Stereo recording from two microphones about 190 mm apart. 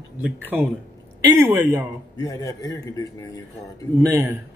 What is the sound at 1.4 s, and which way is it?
Speech, 15° right (ahead or behind).